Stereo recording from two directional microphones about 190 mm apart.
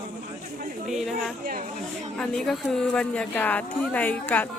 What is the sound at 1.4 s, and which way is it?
Speech, 50° right (ahead or behind).